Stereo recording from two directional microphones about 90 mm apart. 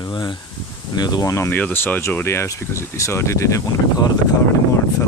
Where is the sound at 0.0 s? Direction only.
60° left (ahead or behind).